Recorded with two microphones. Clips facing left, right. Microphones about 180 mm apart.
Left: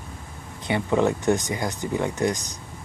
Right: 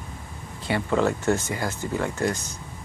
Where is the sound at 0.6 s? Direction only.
20° left (ahead or behind).